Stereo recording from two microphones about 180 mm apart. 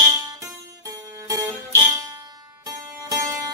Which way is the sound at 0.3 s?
20° right (ahead or behind).